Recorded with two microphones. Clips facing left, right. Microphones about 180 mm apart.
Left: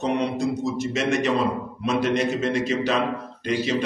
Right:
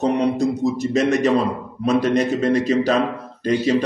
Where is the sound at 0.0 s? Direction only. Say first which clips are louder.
Right 5 dB; 40° right (ahead or behind).